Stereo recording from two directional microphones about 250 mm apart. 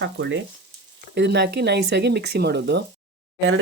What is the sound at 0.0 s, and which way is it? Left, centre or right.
Speech, right.